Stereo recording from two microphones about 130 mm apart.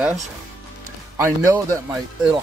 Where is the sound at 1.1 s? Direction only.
20° right (ahead or behind).